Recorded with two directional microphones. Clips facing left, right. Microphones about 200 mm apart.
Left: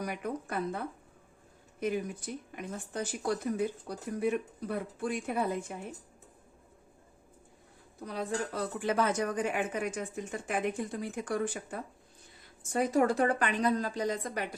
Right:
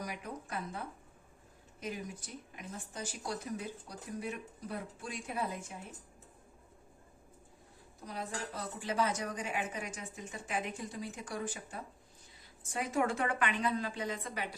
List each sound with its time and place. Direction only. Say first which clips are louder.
0.0 s speech: left 7 dB; 60° left (ahead or behind)
1.8 s speech: left 9 dB; 60° left (ahead or behind)
8.0 s speech: left 7 dB; 60° left (ahead or behind)
12.6 s a woman's voice: left 6 dB; 40° left (ahead or behind)